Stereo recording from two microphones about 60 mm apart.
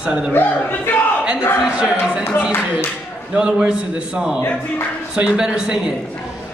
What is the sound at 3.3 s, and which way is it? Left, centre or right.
Speech, centre.